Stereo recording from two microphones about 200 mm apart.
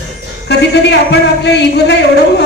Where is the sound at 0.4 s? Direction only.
60° left (ahead or behind).